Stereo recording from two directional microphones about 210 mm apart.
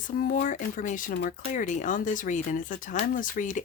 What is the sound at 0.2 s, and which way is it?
Speech, 45° left (ahead or behind).